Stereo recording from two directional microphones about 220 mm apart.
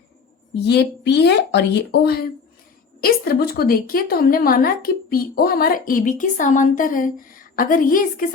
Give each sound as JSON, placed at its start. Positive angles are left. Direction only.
{"t": 0.6, "sound": "a woman's voice", "side_deg": 50}